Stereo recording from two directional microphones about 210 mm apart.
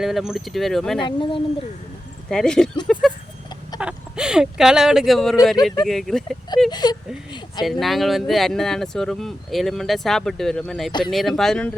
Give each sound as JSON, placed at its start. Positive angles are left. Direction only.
{"t": 0.0, "sound": "speech", "side_deg": 0}
{"t": 1.0, "sound": "speech", "side_deg": 25}
{"t": 2.3, "sound": "speech", "side_deg": 5}
{"t": 2.8, "sound": "a sound", "side_deg": 5}
{"t": 3.8, "sound": "speech", "side_deg": -5}
{"t": 6.7, "sound": "speech", "side_deg": 20}
{"t": 7.6, "sound": "speech", "side_deg": 0}